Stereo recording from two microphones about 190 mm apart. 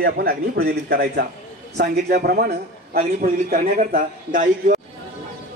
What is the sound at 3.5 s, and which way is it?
A man's voice, 45° right (ahead or behind).